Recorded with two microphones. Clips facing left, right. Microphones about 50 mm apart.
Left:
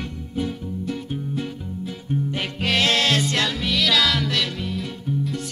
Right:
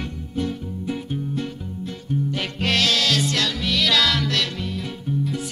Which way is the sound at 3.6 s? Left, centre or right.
Centre.